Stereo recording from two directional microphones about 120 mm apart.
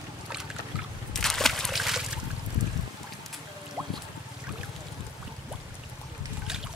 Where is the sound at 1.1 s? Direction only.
5° left (ahead or behind).